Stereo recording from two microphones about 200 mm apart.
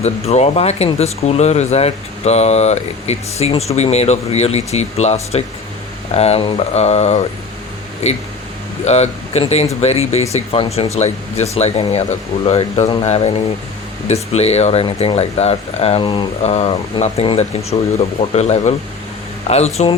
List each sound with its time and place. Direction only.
0.0 s speech: 30° left (ahead or behind)